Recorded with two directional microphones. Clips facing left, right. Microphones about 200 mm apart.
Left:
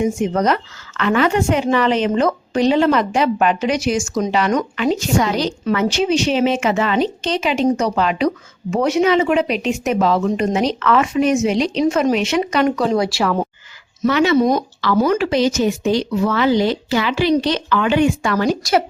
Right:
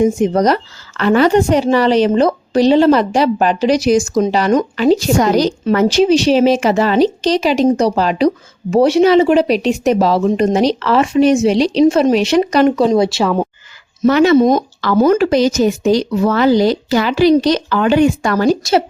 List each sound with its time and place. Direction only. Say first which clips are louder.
0.0 s a woman's voice: right 5 dB; 35° right (ahead or behind)
13.0 s speech: right 4 dB; 25° right (ahead or behind)
14.1 s speech: right 5 dB; 45° right (ahead or behind)
14.3 s speech: right 5 dB; 25° right (ahead or behind)
14.8 s a woman's voice: right 6 dB; 45° right (ahead or behind)